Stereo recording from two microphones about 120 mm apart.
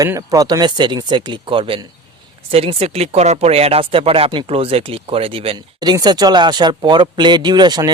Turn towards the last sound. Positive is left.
turn(degrees=-35)  # may be behind; listen again after turning